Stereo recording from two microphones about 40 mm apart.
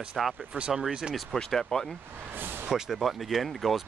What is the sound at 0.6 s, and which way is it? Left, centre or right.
Speech, right.